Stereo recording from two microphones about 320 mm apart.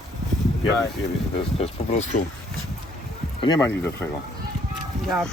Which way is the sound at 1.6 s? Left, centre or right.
Left.